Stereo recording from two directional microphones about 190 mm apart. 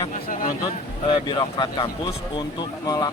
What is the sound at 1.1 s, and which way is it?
A man's voice, 25° left (ahead or behind).